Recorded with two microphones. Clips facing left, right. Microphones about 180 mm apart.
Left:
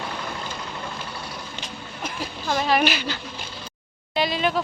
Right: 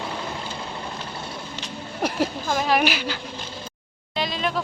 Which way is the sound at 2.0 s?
70° right (ahead or behind).